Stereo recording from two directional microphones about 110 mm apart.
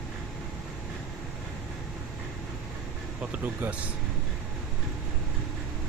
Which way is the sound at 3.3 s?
15° right (ahead or behind).